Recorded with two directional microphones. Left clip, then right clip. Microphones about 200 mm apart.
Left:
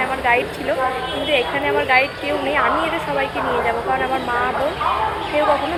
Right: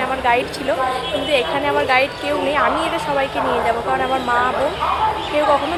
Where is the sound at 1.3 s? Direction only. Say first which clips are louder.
Even; 25° right (ahead or behind).